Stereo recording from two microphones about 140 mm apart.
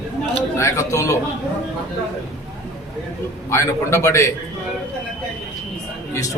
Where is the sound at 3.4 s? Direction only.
20° left (ahead or behind).